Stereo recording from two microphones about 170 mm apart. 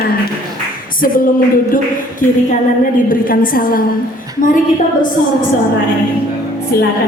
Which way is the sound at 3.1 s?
55° left (ahead or behind).